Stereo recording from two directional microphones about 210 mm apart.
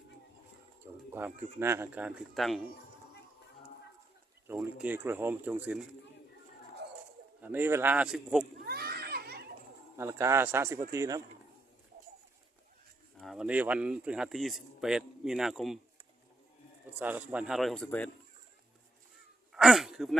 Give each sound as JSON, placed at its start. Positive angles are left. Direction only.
{"t": 1.1, "sound": "speech", "side_deg": -10}
{"t": 4.4, "sound": "speech", "side_deg": -10}
{"t": 7.4, "sound": "speech", "side_deg": -10}
{"t": 8.6, "sound": "children playing", "side_deg": -50}
{"t": 10.0, "sound": "speech", "side_deg": -10}
{"t": 13.1, "sound": "speech", "side_deg": 0}
{"t": 17.0, "sound": "speech", "side_deg": -5}
{"t": 19.5, "sound": "a sound", "side_deg": 0}